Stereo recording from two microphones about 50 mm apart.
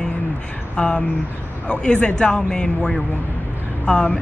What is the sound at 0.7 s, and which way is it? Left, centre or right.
A woman's voice, centre.